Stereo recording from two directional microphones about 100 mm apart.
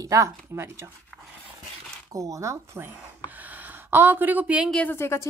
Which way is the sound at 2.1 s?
35° right (ahead or behind).